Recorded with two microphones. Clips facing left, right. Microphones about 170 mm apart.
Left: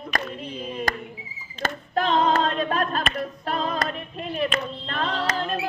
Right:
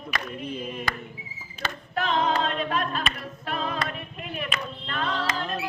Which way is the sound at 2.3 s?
40° left (ahead or behind).